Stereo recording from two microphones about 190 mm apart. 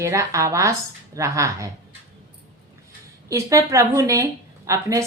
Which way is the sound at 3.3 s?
15° right (ahead or behind).